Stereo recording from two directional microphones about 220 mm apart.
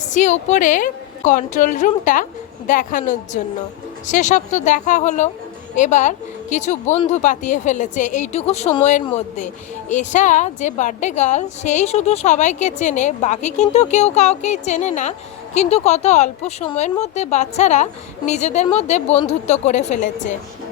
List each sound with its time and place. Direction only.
0.0 s a woman's voice: 35° left (ahead or behind)